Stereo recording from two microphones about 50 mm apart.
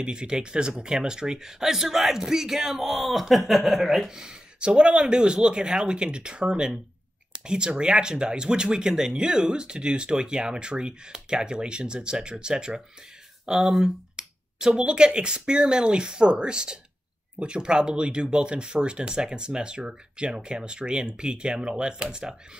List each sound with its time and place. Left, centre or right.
0.0 s speech: centre
13.5 s speech: centre